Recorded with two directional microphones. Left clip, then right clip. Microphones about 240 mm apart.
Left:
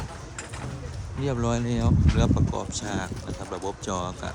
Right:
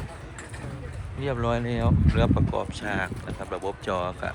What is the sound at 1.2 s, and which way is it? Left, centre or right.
Speech, centre.